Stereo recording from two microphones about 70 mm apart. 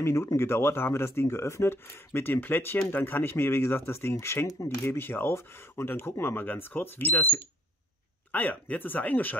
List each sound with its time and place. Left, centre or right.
0.0 s speech: left